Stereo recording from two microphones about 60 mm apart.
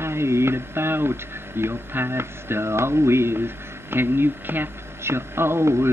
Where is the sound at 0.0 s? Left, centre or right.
Right.